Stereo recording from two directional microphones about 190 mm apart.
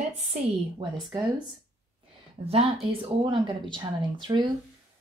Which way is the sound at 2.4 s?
30° right (ahead or behind).